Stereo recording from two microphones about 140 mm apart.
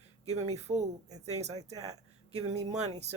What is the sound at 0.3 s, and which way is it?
Speech, 50° right (ahead or behind).